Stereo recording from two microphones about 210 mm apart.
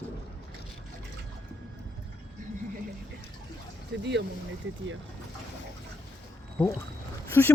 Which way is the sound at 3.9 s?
55° right (ahead or behind).